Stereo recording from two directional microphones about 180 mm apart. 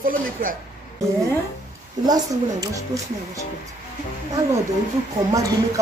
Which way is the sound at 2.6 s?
15° right (ahead or behind).